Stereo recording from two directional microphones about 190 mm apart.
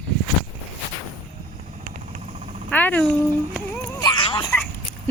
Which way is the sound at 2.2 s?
35° right (ahead or behind).